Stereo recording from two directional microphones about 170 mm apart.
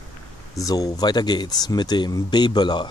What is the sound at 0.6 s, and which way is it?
Speech, 20° left (ahead or behind).